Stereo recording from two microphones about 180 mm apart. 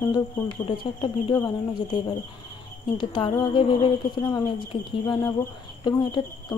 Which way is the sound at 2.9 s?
30° left (ahead or behind).